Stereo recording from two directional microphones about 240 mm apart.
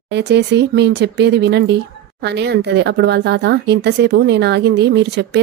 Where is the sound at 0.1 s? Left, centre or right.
Right.